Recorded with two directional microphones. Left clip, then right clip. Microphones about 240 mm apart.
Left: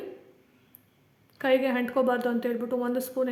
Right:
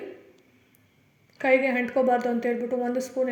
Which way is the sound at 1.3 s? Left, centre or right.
Centre.